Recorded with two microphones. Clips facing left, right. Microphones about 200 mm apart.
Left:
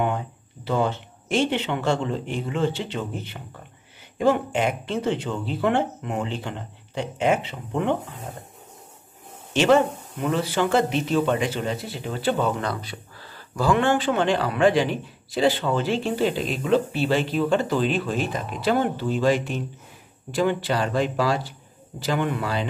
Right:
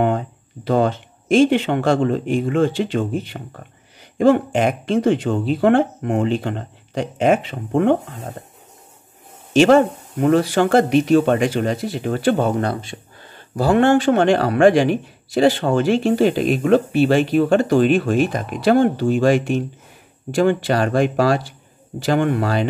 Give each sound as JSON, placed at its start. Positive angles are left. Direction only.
{"t": 0.7, "sound": "speech", "side_deg": -50}
{"t": 4.2, "sound": "speech", "side_deg": -50}
{"t": 9.7, "sound": "speech", "side_deg": -50}
{"t": 11.1, "sound": "speech", "side_deg": -70}
{"t": 11.4, "sound": "speech", "side_deg": -50}
{"t": 12.7, "sound": "a sound", "side_deg": -25}
{"t": 13.6, "sound": "speech", "side_deg": -40}
{"t": 14.2, "sound": "speech", "side_deg": -70}
{"t": 15.4, "sound": "speech", "side_deg": -50}
{"t": 17.7, "sound": "speech", "side_deg": -65}
{"t": 20.6, "sound": "speech", "side_deg": -65}